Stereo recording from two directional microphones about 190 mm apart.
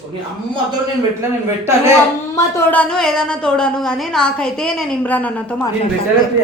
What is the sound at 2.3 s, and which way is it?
Speech, 10° left (ahead or behind).